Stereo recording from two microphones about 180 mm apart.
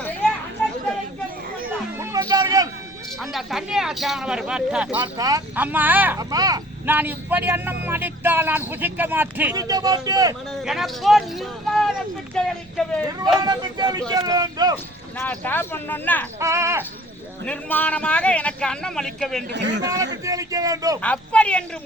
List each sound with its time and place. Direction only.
2.0 s music: 20° right (ahead or behind)
3.2 s speech: centre (ahead or behind)
4.9 s speech: 20° right (ahead or behind)
5.5 s speech: 10° right (ahead or behind)
6.3 s speech: 20° right (ahead or behind)
6.9 s speech: 10° right (ahead or behind)
10.6 s speech: centre (ahead or behind)
13.1 s speech: 20° right (ahead or behind)
15.2 s a man's voice: 10° left (ahead or behind)
16.4 s speech: 15° right (ahead or behind)
17.4 s a man's voice: 10° left (ahead or behind)
19.5 s speech: 75° right (ahead or behind)
19.8 s speech: 20° right (ahead or behind)
21.0 s a man's voice: 5° left (ahead or behind)